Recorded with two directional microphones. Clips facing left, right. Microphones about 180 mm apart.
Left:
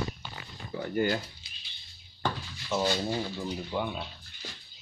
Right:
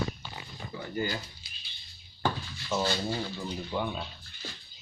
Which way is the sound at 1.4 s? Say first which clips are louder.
Right 1 dB; 20° left (ahead or behind).